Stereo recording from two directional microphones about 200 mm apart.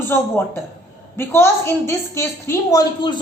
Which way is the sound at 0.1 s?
10° left (ahead or behind).